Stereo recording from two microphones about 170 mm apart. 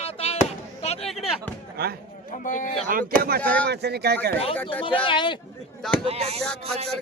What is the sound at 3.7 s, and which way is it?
Speech, 75° right (ahead or behind).